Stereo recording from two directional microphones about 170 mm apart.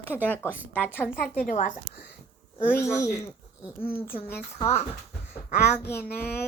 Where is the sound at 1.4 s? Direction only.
50° left (ahead or behind).